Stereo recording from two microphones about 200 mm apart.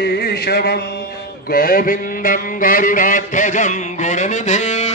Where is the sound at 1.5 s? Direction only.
45° left (ahead or behind).